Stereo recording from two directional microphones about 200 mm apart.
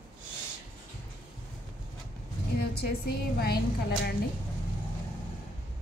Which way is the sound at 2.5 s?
50° left (ahead or behind).